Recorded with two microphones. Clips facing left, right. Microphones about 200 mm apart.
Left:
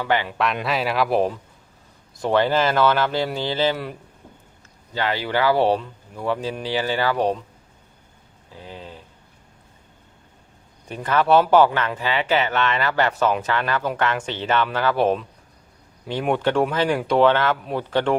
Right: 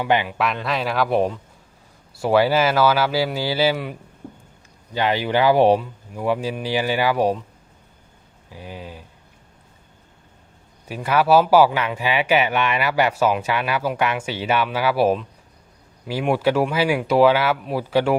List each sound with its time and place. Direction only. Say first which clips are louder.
0.0 s speech: right 2 dB; 15° right (ahead or behind)
0.3 s speech: even; centre (ahead or behind)
4.9 s speech: right 3 dB; 15° right (ahead or behind)
8.5 s speech: right 2 dB; 10° right (ahead or behind)
10.8 s speech: right 1 dB; 10° right (ahead or behind)